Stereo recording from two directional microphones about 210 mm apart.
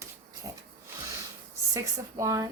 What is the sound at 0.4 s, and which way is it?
Pig, 20° right (ahead or behind).